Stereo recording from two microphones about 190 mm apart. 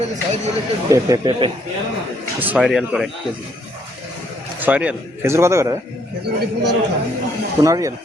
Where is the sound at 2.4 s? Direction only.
5° right (ahead or behind).